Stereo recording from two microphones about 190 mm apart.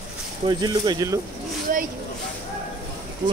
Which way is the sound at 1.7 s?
45° right (ahead or behind).